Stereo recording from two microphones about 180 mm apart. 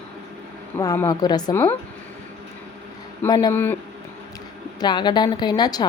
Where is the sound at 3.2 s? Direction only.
20° left (ahead or behind).